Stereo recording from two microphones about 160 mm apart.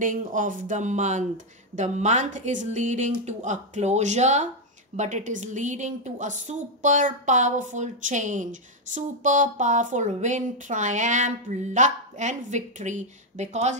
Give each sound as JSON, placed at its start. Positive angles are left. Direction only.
{"t": 0.0, "sound": "a woman's voice", "side_deg": -55}